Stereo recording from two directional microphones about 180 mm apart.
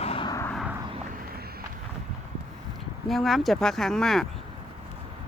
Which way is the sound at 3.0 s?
Centre (ahead or behind).